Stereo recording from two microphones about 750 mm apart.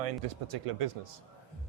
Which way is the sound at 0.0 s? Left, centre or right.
Right.